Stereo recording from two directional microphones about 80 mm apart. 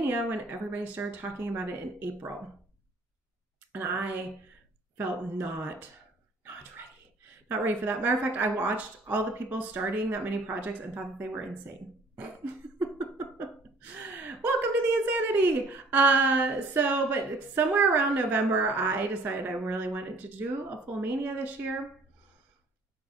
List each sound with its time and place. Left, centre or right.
0.1 s a woman's voice: right
3.7 s a woman's voice: right
6.4 s a sound: right
7.4 s a woman's voice: right
12.7 s laughter: centre
21.0 s a woman's voice: right